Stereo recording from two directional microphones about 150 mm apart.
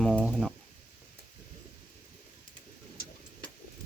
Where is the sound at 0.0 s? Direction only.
Centre (ahead or behind).